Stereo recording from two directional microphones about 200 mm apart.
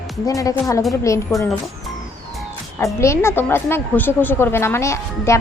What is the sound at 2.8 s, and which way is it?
A woman's voice, 15° left (ahead or behind).